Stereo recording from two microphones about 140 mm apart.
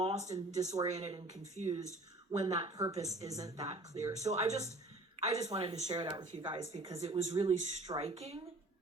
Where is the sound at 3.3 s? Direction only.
25° right (ahead or behind).